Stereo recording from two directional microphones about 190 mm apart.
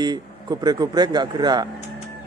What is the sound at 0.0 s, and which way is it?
Speech, 20° right (ahead or behind).